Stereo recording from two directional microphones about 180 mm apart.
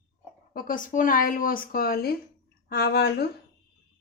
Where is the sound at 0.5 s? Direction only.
50° left (ahead or behind).